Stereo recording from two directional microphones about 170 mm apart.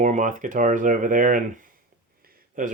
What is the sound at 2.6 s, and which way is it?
Speech, 55° right (ahead or behind).